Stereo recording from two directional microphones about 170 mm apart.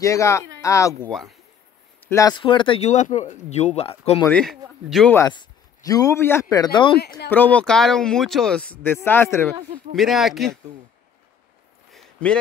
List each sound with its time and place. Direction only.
0.0 s speech: 20° left (ahead or behind)
2.0 s speech: 15° left (ahead or behind); by 4.2 s 35° left (ahead or behind)
4.3 s a man's voice: 5° left (ahead or behind)
5.3 s a man's voice: 25° left (ahead or behind)
7.2 s speech: 10° left (ahead or behind)
9.9 s a man's voice: centre (ahead or behind)
11.9 s a sound: 5° left (ahead or behind)